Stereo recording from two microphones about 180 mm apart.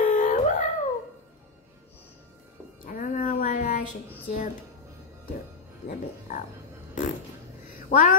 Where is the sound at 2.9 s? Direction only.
50° left (ahead or behind).